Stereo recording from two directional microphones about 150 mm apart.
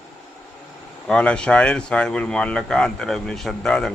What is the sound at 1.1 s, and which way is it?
Speech, 5° left (ahead or behind).